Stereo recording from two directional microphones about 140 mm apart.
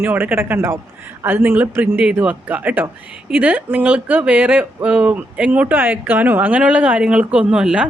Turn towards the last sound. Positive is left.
turn(degrees=-5)  # may be behind; listen again after turning